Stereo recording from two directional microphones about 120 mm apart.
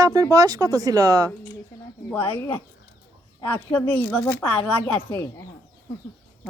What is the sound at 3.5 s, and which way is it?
Speech, 15° left (ahead or behind).